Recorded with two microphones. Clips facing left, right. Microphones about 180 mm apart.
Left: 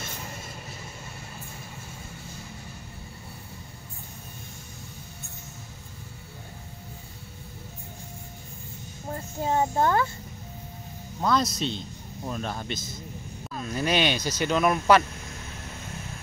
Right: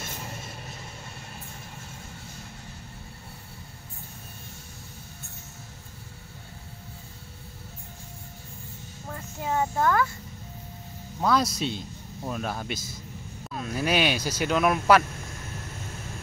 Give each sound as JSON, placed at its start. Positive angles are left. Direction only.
{"t": 9.1, "sound": "speech", "side_deg": 30}
{"t": 11.1, "sound": "a man's voice", "side_deg": -5}